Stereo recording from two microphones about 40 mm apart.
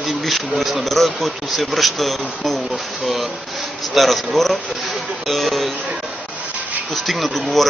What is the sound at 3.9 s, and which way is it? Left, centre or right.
Speech, centre.